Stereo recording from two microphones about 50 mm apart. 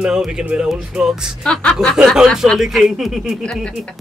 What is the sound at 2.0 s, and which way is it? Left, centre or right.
Speech, centre.